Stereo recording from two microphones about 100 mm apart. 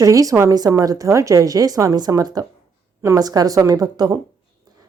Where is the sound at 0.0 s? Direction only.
35° right (ahead or behind).